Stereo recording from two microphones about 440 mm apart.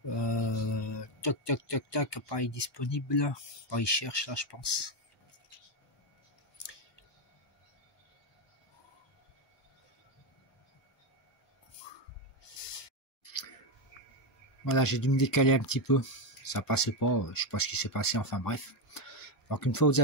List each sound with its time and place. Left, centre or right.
0.1 s speech: left
12.7 s a sound: left
14.6 s speech: left